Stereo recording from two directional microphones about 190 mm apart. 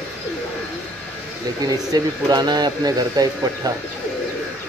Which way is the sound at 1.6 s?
20° right (ahead or behind).